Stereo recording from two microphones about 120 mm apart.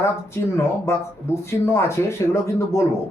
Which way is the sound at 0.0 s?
20° left (ahead or behind).